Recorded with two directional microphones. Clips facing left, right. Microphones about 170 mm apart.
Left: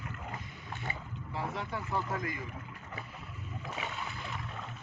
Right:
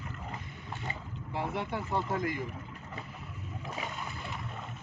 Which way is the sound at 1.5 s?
25° right (ahead or behind).